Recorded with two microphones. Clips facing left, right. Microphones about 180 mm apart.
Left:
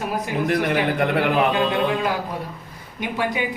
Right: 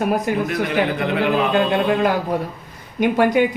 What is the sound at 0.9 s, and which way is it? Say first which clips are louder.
Speech: even; 60° left (ahead or behind).